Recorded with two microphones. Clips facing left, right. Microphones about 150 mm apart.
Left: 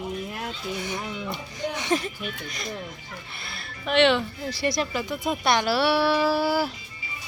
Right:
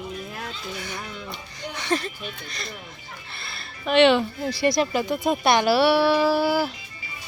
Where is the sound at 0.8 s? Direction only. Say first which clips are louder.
Left 3 dB; 15° left (ahead or behind).